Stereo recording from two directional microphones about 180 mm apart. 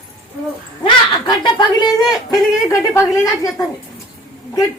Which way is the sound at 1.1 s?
25° left (ahead or behind).